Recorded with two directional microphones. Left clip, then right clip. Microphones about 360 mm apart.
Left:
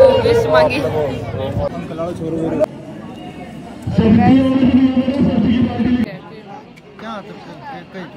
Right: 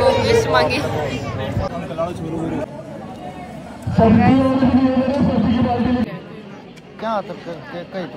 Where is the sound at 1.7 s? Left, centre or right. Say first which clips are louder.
Even; centre.